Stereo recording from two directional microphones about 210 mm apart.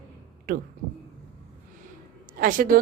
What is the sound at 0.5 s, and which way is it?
Speech, 40° right (ahead or behind).